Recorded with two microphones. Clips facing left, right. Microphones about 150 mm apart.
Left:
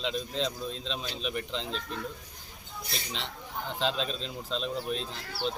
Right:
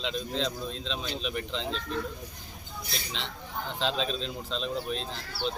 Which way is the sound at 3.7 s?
5° left (ahead or behind).